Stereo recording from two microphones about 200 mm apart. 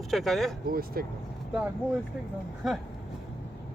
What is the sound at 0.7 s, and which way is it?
Speech, 50° right (ahead or behind).